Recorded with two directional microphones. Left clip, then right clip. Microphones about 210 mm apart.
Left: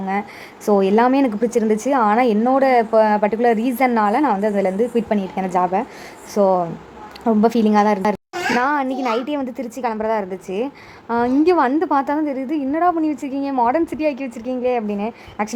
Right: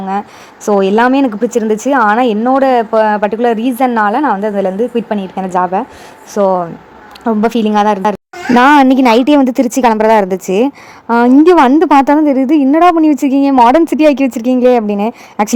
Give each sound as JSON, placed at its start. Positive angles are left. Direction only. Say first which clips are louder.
{"t": 0.6, "sound": "a woman's voice", "louder": "right 5 dB", "side_deg": -15}
{"t": 8.5, "sound": "a woman's voice", "louder": "right 14 dB", "side_deg": -45}